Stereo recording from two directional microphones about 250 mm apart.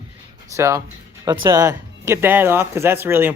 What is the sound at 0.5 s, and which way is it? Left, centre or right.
Speech, centre.